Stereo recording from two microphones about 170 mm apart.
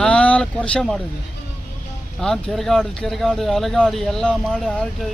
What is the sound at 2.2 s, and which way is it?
Speech, centre (ahead or behind).